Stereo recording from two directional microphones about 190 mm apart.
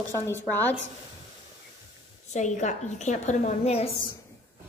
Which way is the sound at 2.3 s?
40° left (ahead or behind).